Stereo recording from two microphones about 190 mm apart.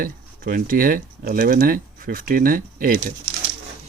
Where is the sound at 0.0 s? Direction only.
45° right (ahead or behind).